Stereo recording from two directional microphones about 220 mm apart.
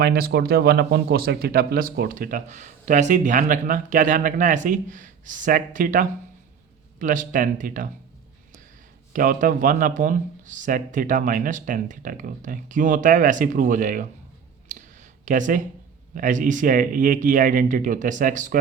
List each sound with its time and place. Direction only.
0.0 s speech: 45° right (ahead or behind)
9.1 s speech: 40° right (ahead or behind)
14.7 s a sound: 35° right (ahead or behind)
16.1 s speech: 35° right (ahead or behind)